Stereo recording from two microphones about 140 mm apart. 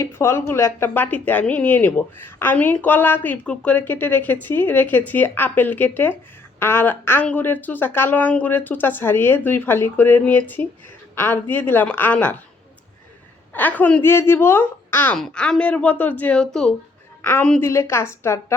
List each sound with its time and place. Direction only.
0.0 s a woman's voice: 20° left (ahead or behind)
13.5 s a woman's voice: 10° left (ahead or behind)